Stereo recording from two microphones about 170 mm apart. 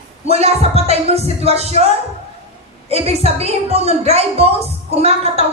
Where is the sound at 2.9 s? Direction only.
35° right (ahead or behind).